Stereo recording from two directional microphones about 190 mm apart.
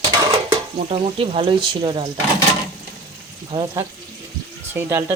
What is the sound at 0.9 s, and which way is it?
Speech, 30° right (ahead or behind).